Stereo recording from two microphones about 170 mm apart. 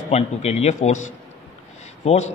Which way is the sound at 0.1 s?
40° left (ahead or behind).